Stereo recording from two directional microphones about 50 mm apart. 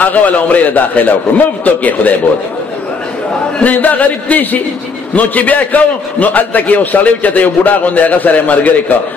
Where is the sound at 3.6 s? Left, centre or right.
Left.